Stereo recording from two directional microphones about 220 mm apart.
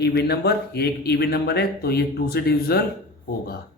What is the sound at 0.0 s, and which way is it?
Speech, 50° left (ahead or behind).